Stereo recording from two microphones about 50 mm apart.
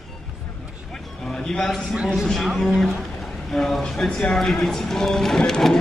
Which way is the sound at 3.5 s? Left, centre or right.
Centre.